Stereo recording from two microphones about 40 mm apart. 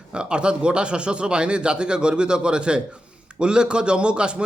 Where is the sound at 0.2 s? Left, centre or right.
Right.